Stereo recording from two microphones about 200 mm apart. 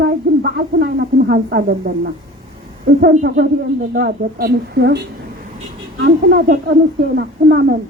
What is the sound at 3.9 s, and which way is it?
Speech, 50° right (ahead or behind).